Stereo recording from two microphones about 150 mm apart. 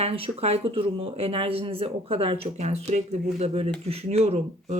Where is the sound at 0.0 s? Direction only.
40° right (ahead or behind).